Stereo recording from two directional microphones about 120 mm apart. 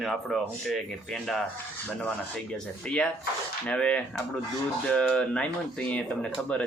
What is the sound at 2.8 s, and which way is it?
Speech, 10° left (ahead or behind).